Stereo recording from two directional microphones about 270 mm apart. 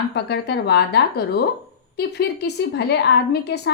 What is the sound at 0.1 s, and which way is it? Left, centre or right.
A woman's voice, left.